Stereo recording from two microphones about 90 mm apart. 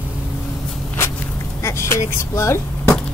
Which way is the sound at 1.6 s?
30° left (ahead or behind).